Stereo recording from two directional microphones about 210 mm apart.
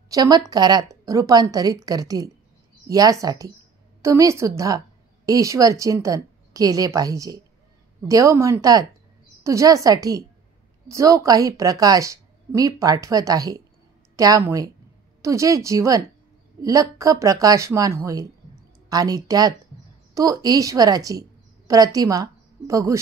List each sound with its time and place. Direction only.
0.1 s a woman's voice: 20° right (ahead or behind)